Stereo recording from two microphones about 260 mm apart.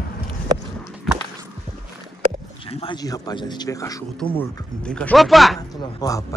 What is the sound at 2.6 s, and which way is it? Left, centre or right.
A man's voice, left.